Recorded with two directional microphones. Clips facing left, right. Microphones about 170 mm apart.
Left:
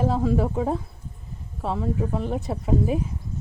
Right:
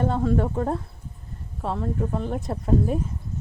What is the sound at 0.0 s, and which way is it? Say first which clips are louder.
Speech: even; centre (ahead or behind).